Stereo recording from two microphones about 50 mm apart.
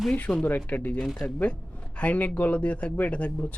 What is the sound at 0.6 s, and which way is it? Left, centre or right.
A man's voice, left.